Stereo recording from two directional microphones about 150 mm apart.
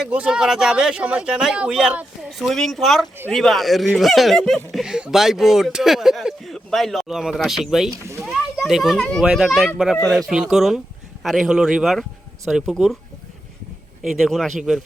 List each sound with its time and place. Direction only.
0.0 s speech: 5° right (ahead or behind)
14.0 s speech: centre (ahead or behind)